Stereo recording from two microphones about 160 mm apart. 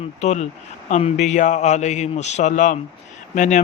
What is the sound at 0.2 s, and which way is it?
A man's voice, 45° left (ahead or behind).